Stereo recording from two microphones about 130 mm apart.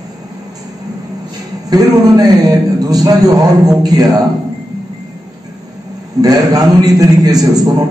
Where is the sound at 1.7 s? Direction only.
30° right (ahead or behind).